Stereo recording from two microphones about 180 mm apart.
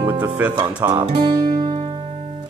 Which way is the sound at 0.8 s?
25° right (ahead or behind).